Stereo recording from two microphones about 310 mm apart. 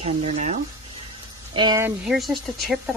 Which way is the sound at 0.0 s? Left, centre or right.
Right.